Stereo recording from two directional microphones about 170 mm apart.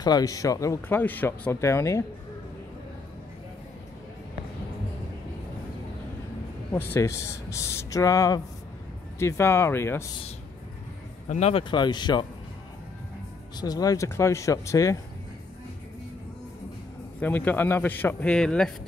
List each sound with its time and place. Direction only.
0.0 s speech: 20° left (ahead or behind)
6.7 s speech: 15° left (ahead or behind)
11.2 s speech: 40° left (ahead or behind)
13.6 s speech: 20° left (ahead or behind)
17.2 s speech: 10° left (ahead or behind)